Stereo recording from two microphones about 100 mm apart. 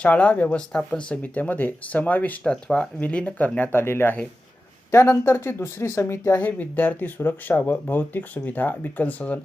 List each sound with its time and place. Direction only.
0.0 s speech: 10° left (ahead or behind); by 6.4 s 25° left (ahead or behind)
6.4 s speech: 15° left (ahead or behind)